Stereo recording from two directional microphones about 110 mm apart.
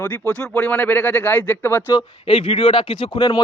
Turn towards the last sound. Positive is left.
turn(degrees=45)  # may be behind; listen again after turning